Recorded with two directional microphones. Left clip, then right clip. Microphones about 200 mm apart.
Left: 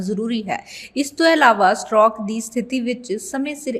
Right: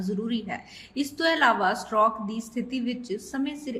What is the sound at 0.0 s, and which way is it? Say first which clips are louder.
Speech: left 7 dB; 35° left (ahead or behind).